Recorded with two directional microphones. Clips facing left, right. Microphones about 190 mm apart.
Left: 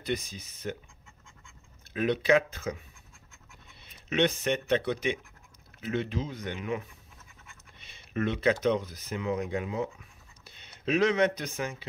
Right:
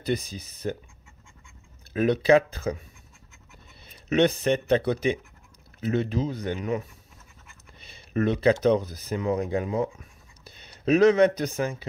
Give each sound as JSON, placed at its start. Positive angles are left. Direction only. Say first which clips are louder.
{"t": 0.0, "sound": "speech", "louder": "right 5 dB", "side_deg": -35}
{"t": 2.0, "sound": "speech", "louder": "right 5 dB", "side_deg": -35}
{"t": 3.8, "sound": "speech", "louder": "right 5 dB", "side_deg": -35}